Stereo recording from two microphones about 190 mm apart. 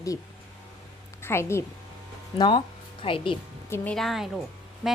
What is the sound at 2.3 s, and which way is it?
Speech, 25° left (ahead or behind).